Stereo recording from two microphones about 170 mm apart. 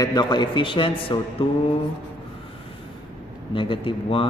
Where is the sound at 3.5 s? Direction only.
30° left (ahead or behind).